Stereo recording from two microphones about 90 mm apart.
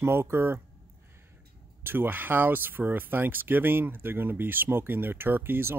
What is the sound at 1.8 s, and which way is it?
A man's voice, 25° right (ahead or behind).